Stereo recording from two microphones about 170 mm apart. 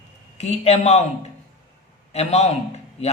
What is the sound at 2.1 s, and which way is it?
Speech, 40° left (ahead or behind).